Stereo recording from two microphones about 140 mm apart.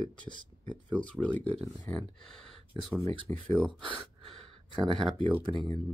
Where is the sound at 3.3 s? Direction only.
15° left (ahead or behind).